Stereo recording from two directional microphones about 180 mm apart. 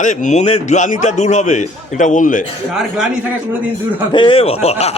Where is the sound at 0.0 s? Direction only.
45° left (ahead or behind).